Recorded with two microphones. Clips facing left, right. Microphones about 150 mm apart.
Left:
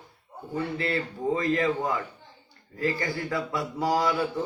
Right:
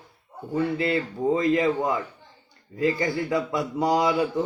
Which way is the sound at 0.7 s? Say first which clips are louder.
Right 4 dB; 20° right (ahead or behind).